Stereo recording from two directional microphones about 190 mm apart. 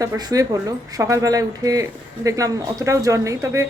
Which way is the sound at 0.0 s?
20° right (ahead or behind).